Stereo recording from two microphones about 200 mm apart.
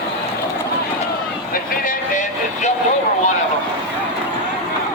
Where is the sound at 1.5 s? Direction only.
40° left (ahead or behind).